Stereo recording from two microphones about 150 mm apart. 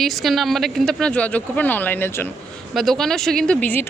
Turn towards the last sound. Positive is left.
turn(degrees=10)  # may be behind; listen again after turning